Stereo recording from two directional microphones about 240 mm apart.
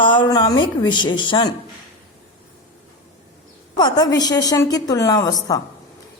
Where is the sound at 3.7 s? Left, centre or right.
Centre.